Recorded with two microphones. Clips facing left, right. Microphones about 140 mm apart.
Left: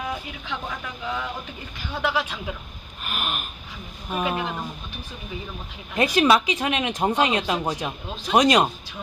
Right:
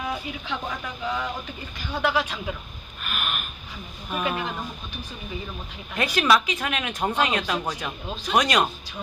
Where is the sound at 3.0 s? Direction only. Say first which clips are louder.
Left 1 dB; 30° left (ahead or behind).